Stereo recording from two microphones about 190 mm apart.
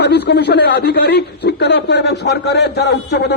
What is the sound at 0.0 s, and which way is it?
A man's voice, 60° left (ahead or behind).